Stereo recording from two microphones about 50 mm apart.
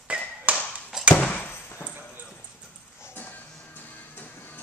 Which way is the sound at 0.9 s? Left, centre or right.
Centre.